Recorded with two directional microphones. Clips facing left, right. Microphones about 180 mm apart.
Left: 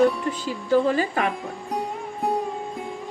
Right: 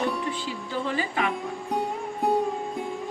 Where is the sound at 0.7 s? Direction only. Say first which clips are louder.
Left 10 dB; 45° left (ahead or behind).